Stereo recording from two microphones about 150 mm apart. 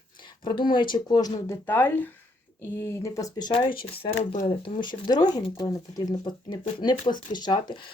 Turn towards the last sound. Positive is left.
turn(degrees=30)  # may be behind; listen again after turning